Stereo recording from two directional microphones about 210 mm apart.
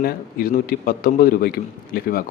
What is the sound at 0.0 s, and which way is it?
Speech, 45° left (ahead or behind).